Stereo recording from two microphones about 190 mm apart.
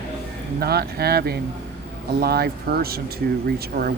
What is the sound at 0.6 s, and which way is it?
A man's voice, 55° right (ahead or behind).